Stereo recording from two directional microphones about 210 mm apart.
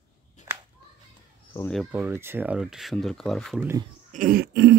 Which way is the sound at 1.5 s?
5° left (ahead or behind).